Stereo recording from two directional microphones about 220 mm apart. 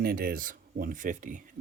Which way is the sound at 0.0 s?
40° right (ahead or behind).